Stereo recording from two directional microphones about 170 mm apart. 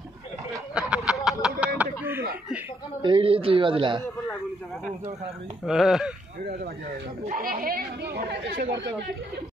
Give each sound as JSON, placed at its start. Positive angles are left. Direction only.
{"t": 0.7, "sound": "a sound", "side_deg": -5}
{"t": 1.8, "sound": "speech", "side_deg": -10}
{"t": 3.0, "sound": "a man's voice", "side_deg": -30}
{"t": 5.7, "sound": "speech", "side_deg": 0}
{"t": 7.2, "sound": "speech", "side_deg": -55}
{"t": 8.7, "sound": "speech", "side_deg": -90}